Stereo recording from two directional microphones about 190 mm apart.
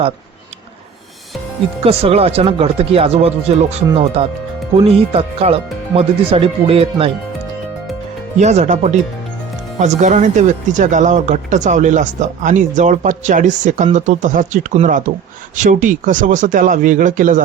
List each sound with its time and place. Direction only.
1.8 s speech: 30° right (ahead or behind)
8.4 s speech: 35° right (ahead or behind)